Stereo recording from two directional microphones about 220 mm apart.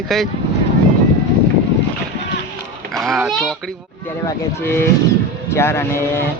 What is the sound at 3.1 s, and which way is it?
Speech, centre (ahead or behind).